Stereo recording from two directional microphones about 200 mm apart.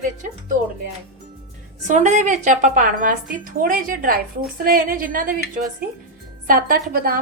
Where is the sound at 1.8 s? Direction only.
35° right (ahead or behind).